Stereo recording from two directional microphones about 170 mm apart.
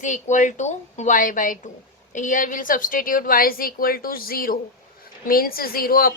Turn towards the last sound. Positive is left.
turn(degrees=60)  # may be behind; listen again after turning